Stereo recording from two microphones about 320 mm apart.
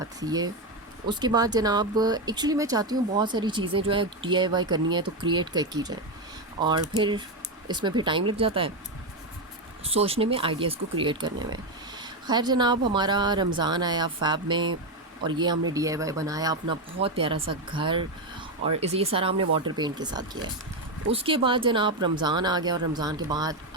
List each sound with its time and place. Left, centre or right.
0.0 s speech: centre
9.8 s speech: centre